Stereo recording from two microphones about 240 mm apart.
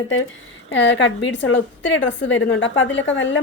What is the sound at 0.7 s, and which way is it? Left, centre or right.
Speech, left.